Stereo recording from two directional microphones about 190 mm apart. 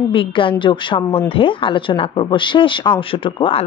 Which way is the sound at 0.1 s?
25° left (ahead or behind).